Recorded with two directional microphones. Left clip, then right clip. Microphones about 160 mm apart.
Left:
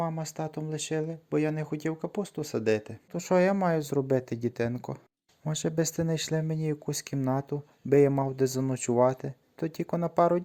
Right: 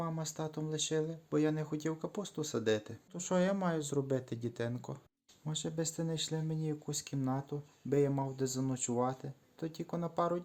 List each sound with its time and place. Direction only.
0.0 s speech: 30° left (ahead or behind); by 10.4 s 45° left (ahead or behind)